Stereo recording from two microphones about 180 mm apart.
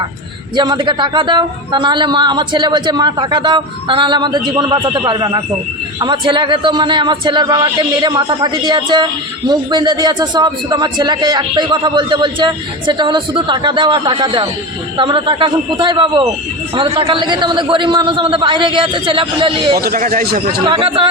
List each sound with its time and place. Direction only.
0.5 s a man's voice: 25° right (ahead or behind)
19.7 s a man's voice: 55° right (ahead or behind)
20.7 s a man's voice: 30° right (ahead or behind)